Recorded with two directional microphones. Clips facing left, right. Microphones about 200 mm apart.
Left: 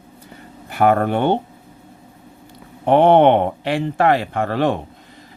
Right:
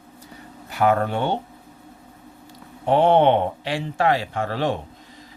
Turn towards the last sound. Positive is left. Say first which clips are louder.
# left 5 dB
turn(degrees=55)  # may be behind; listen again after turning